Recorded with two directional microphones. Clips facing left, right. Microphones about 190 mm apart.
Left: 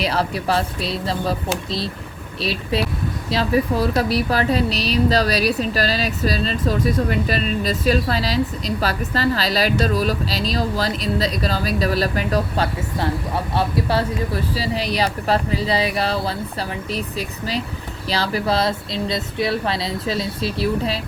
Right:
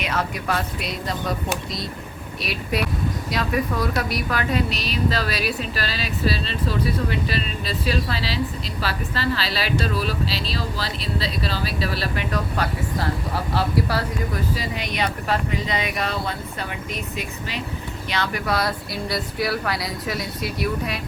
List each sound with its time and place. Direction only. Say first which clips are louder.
0.0 s a woman's voice: left 4 dB; 35° left (ahead or behind)